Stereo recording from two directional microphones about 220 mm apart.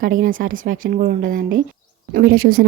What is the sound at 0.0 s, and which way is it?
A woman's voice, 40° right (ahead or behind).